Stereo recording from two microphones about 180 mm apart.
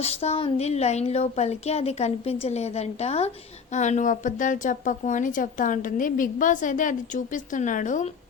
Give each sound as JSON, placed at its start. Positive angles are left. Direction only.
{"t": 0.0, "sound": "a woman's voice", "side_deg": 35}